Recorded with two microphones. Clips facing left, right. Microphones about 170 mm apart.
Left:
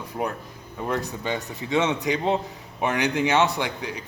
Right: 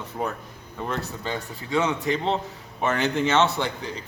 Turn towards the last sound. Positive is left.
turn(degrees=15)  # may be behind; listen again after turning